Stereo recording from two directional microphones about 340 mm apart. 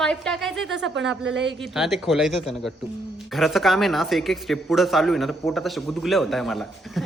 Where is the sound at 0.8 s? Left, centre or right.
Right.